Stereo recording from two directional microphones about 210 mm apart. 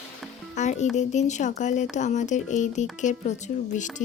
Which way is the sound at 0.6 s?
35° left (ahead or behind).